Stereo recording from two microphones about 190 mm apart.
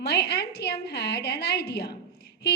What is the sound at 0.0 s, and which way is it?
A woman's voice, 60° left (ahead or behind).